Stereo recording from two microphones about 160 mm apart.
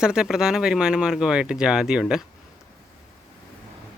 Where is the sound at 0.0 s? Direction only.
5° right (ahead or behind).